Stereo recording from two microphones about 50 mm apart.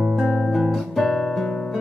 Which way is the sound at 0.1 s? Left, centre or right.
Centre.